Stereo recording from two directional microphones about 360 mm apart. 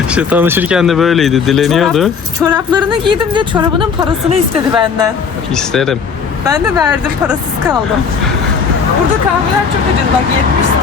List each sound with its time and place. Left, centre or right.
0.1 s speech: centre
2.5 s speech: centre
5.5 s speech: centre